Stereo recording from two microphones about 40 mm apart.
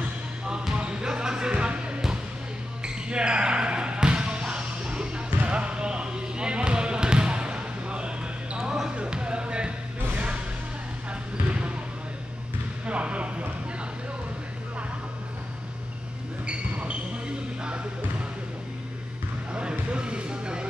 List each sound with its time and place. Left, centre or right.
0.5 s music: right
2.8 s basketball bounce: right
8.5 s basketball bounce: centre
8.9 s music: right
12.8 s basketball bounce: right
16.4 s a sound: right
19.5 s a sound: right